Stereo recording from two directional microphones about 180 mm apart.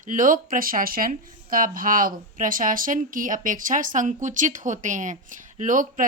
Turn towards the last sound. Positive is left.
turn(degrees=-45)  # may be behind; listen again after turning